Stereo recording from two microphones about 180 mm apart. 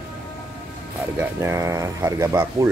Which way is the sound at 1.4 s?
15° right (ahead or behind).